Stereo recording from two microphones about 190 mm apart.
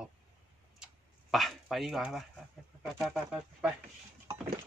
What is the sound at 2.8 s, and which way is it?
Speech, centre (ahead or behind).